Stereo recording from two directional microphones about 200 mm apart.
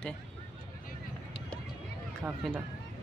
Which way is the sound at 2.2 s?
5° right (ahead or behind).